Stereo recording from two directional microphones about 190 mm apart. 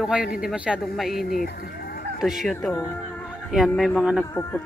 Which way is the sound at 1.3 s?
55° left (ahead or behind).